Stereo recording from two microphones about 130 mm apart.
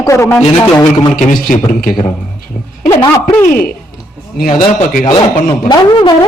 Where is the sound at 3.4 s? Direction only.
90° left.